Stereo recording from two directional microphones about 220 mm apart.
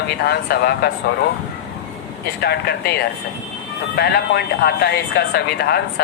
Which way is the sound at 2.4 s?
45° left (ahead or behind).